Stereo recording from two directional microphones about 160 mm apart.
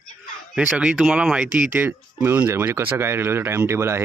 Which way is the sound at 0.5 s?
5° right (ahead or behind).